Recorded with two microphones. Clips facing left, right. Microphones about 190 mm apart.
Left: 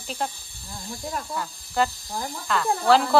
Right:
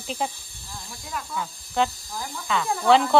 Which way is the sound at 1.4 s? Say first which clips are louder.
Right 1 dB; centre (ahead or behind).